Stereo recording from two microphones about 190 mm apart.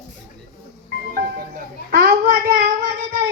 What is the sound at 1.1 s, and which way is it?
Music, 50° right (ahead or behind).